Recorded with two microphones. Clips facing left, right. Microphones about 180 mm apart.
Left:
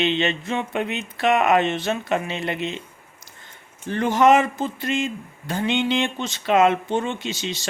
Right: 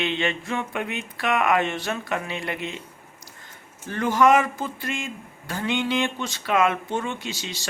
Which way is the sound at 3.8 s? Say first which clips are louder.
Left 2 dB; 25° left (ahead or behind).